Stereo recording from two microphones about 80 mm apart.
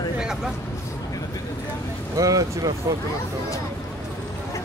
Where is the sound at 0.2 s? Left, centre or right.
Centre.